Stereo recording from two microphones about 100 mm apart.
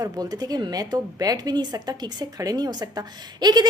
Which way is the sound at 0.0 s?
40° right (ahead or behind).